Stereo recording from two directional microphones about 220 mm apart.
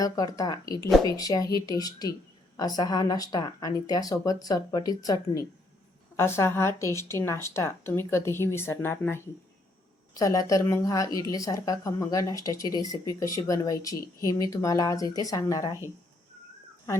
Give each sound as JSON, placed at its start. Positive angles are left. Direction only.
{"t": 0.0, "sound": "a woman's voice", "side_deg": 15}